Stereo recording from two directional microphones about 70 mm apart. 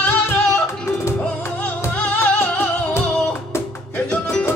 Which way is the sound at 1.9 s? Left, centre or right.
Left.